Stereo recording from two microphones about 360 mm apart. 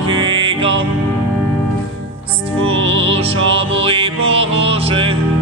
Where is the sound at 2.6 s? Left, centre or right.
Right.